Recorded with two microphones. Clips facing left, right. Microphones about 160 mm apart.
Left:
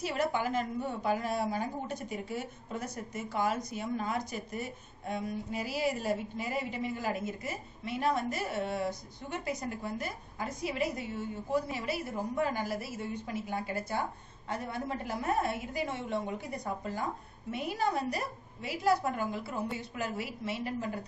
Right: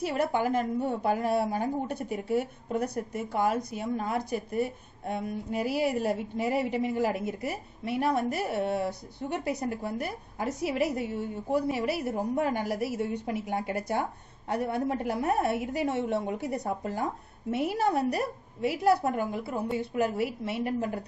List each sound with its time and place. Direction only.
0.0 s a woman's voice: 55° right (ahead or behind)